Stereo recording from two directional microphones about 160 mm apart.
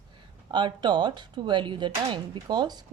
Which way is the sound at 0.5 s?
30° right (ahead or behind).